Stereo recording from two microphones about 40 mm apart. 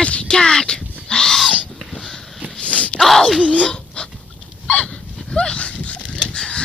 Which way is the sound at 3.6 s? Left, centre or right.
Left.